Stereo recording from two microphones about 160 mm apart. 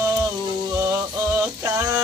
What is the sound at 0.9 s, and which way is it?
Music, 15° right (ahead or behind).